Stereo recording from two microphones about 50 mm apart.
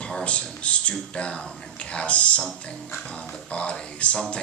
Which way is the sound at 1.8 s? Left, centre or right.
Left.